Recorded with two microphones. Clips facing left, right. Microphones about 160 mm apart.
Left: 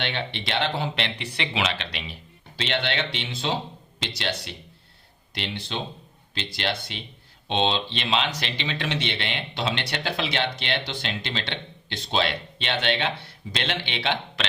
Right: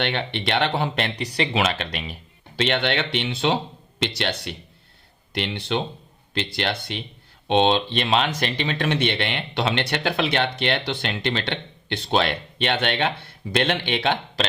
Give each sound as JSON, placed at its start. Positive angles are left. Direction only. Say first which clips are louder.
{"t": 0.0, "sound": "speech", "louder": "right 5 dB", "side_deg": -60}